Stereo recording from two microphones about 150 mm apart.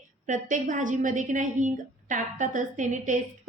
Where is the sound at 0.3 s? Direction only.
60° right (ahead or behind).